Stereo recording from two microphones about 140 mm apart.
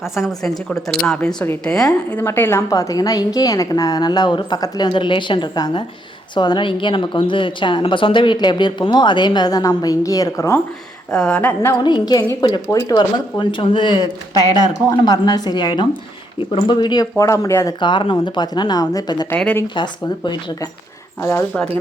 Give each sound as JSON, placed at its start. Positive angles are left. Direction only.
{"t": 0.0, "sound": "a woman's voice", "side_deg": 0}
{"t": 11.1, "sound": "speech", "side_deg": 10}
{"t": 11.8, "sound": "a woman's voice", "side_deg": 30}
{"t": 17.7, "sound": "a woman's voice", "side_deg": 35}
{"t": 19.3, "sound": "speech", "side_deg": 10}
{"t": 19.6, "sound": "a woman's voice", "side_deg": 35}